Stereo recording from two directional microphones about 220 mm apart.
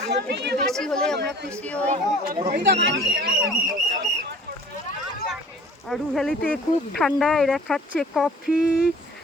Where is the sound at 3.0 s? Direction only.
Centre (ahead or behind).